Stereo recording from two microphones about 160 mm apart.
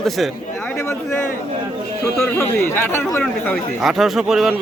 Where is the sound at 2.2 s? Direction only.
15° left (ahead or behind).